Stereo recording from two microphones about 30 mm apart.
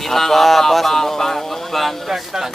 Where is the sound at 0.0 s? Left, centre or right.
Centre.